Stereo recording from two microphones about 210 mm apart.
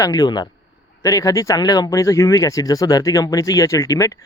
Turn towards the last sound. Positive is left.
turn(degrees=15)  # may be behind; listen again after turning